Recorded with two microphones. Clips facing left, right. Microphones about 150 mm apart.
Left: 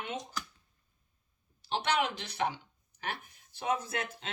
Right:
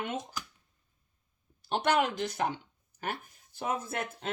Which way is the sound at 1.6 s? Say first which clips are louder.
Right 3 dB; 50° right (ahead or behind).